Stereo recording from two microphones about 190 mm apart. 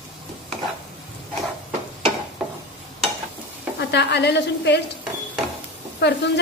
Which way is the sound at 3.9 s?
60° left (ahead or behind).